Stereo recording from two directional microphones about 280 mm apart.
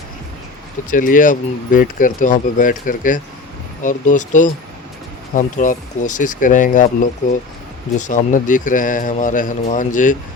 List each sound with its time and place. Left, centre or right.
0.9 s speech: left